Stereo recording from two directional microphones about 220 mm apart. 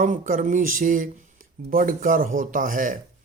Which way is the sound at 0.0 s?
35° right (ahead or behind).